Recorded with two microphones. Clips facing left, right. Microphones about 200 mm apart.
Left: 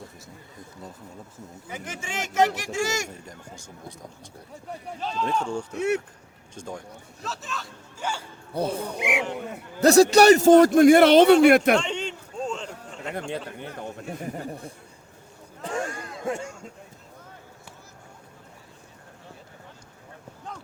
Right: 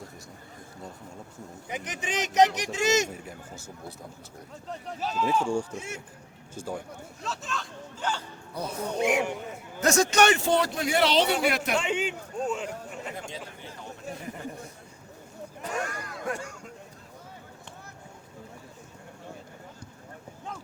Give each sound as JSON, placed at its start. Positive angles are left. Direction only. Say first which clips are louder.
{"t": 1.6, "sound": "speech", "louder": "right 2 dB", "side_deg": -20}
{"t": 3.2, "sound": "speech", "louder": "right 1 dB", "side_deg": -5}
{"t": 4.5, "sound": "speech", "louder": "left 1 dB", "side_deg": 10}
{"t": 4.9, "sound": "speech", "louder": "right 1 dB", "side_deg": -5}
{"t": 5.7, "sound": "a man's voice", "louder": "left 13 dB", "side_deg": 65}
{"t": 6.5, "sound": "speech", "louder": "right 2 dB", "side_deg": -5}
{"t": 8.5, "sound": "speech", "louder": "left 6 dB", "side_deg": 30}
{"t": 9.0, "sound": "speech", "louder": "right 5 dB", "side_deg": 15}
{"t": 9.8, "sound": "a man's voice", "louder": "left 8 dB", "side_deg": 35}
{"t": 11.8, "sound": "a sound", "louder": "right 1 dB", "side_deg": -5}
{"t": 13.3, "sound": "a man's voice", "louder": "left 7 dB", "side_deg": 60}
{"t": 14.3, "sound": "speech", "louder": "left 4 dB", "side_deg": 35}
{"t": 15.6, "sound": "a sound", "louder": "left 3 dB", "side_deg": 25}